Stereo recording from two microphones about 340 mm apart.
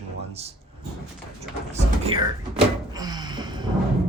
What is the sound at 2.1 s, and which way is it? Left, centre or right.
Speech, centre.